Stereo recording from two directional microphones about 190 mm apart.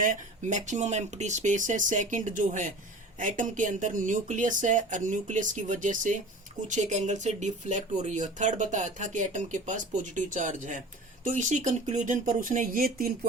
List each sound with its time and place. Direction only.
0.0 s speech: 40° right (ahead or behind)